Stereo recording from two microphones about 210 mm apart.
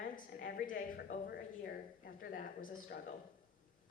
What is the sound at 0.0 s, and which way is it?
A woman's voice, 45° left (ahead or behind).